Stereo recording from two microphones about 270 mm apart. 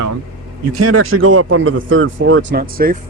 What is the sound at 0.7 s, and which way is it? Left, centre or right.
Speech, right.